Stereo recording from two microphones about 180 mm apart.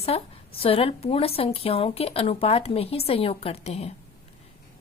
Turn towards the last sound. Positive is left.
turn(degrees=35)  # may be behind; listen again after turning